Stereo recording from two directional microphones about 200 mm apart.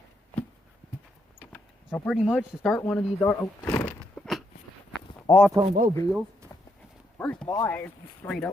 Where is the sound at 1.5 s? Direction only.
10° left (ahead or behind).